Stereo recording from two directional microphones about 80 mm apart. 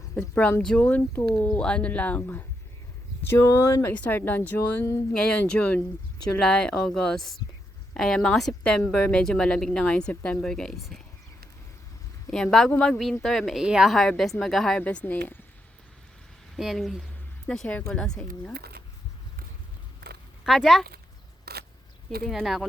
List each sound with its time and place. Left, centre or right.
0.2 s speech: centre; by 3.9 s left
4.0 s speech: left
5.1 s speech: centre
6.4 s speech: centre
12.3 s speech: centre
13.6 s speech: centre
14.8 s speech: centre
16.6 s speech: centre
20.4 s speech: centre
22.3 s speech: centre